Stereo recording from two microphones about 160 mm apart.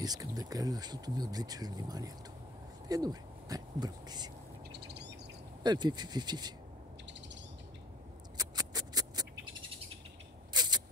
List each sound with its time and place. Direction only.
0.0 s speech: 25° right (ahead or behind)
4.7 s bird: 90° right
5.6 s speech: 25° right (ahead or behind)
7.1 s owl: 90° right
8.4 s a sound: 25° right (ahead or behind)
10.5 s a sound: 25° right (ahead or behind)